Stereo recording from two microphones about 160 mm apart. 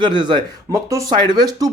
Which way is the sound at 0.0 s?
30° right (ahead or behind).